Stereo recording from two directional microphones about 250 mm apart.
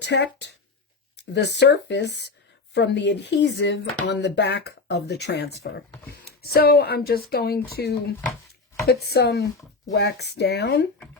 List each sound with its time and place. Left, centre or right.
0.0 s speech: left